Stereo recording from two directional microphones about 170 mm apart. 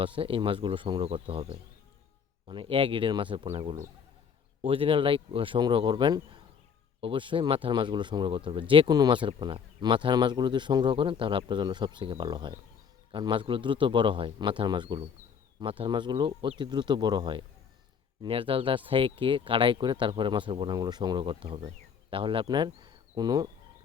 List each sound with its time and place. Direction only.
0.0 s speech: 30° right (ahead or behind)